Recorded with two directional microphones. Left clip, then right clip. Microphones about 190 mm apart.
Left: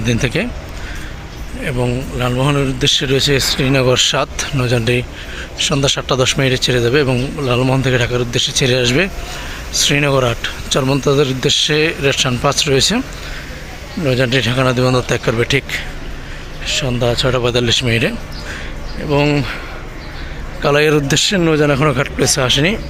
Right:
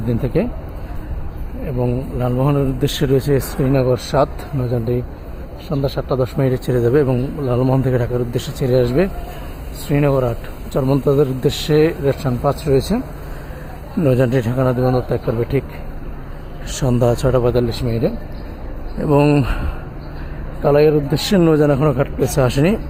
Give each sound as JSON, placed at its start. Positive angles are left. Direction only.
{"t": 0.1, "sound": "a man's voice", "side_deg": 0}
{"t": 1.6, "sound": "a man's voice", "side_deg": -5}
{"t": 14.0, "sound": "a man's voice", "side_deg": -15}
{"t": 16.6, "sound": "speech", "side_deg": -25}
{"t": 17.2, "sound": "a man's voice", "side_deg": -5}
{"t": 19.0, "sound": "speech", "side_deg": -25}
{"t": 20.7, "sound": "speech", "side_deg": 5}
{"t": 21.2, "sound": "speech", "side_deg": -15}
{"t": 21.7, "sound": "a man's voice", "side_deg": 0}
{"t": 22.4, "sound": "speech", "side_deg": -15}